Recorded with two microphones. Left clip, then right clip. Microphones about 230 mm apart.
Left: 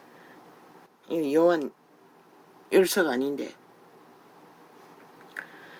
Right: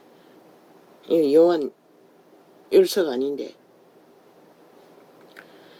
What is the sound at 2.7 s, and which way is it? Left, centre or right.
Speech, left.